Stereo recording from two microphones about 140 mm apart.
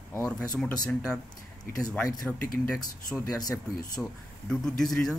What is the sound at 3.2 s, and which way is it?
Speech, 25° left (ahead or behind).